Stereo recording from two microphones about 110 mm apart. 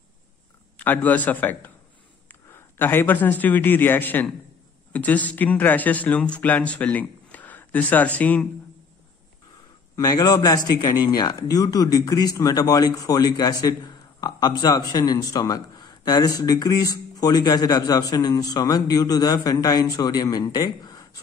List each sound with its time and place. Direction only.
0.7 s a man's voice: 15° left (ahead or behind)
9.9 s a man's voice: 35° left (ahead or behind)